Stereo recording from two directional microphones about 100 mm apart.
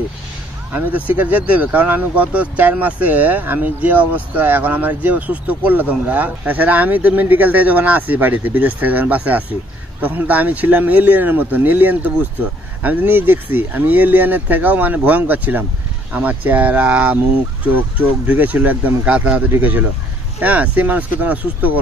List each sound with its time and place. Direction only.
0.7 s speech: 15° right (ahead or behind)